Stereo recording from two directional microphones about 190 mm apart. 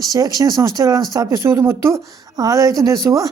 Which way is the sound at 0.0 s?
20° right (ahead or behind).